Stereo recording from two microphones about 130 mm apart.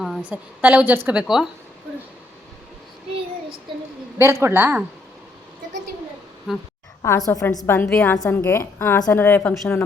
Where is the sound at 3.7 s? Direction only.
40° right (ahead or behind).